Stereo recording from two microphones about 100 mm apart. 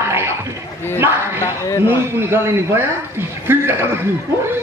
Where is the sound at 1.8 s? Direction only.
25° right (ahead or behind).